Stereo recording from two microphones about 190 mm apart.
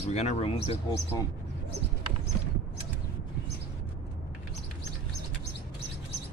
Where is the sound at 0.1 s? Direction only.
35° left (ahead or behind).